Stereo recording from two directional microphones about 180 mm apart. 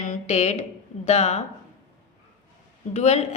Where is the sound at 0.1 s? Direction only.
40° left (ahead or behind).